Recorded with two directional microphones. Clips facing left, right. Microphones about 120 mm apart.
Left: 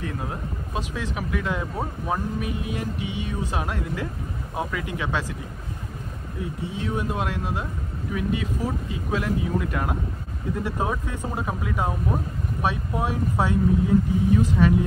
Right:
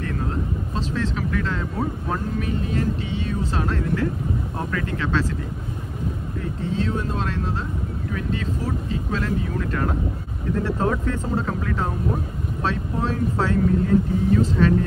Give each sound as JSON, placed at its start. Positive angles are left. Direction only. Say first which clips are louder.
{"t": 0.0, "sound": "speech", "louder": "right 4 dB", "side_deg": 15}
{"t": 6.6, "sound": "speech", "louder": "right 4 dB", "side_deg": 15}